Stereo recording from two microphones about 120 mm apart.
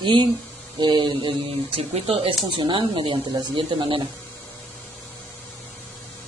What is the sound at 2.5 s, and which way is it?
Speech, 40° right (ahead or behind).